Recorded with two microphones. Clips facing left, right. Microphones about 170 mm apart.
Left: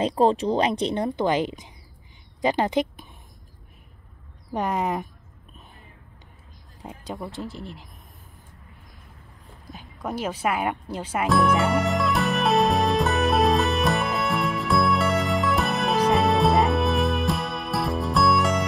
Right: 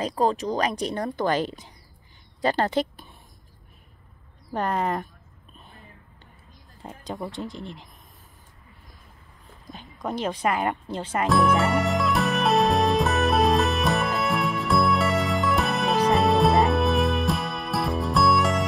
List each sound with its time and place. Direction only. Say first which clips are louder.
0.0 s a woman's voice: left 4 dB; 30° left (ahead or behind)
4.6 s speech: even; 10° left (ahead or behind)
6.8 s speech: right 1 dB; 10° left (ahead or behind)
9.7 s music: right 1 dB; 10° left (ahead or behind)